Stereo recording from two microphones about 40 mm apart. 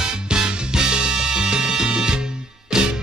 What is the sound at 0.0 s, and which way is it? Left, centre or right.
Music, centre.